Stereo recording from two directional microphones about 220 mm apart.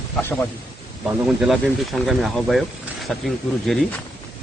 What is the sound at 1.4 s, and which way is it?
Speech, centre (ahead or behind).